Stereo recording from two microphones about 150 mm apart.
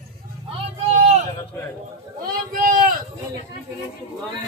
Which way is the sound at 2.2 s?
75° right (ahead or behind).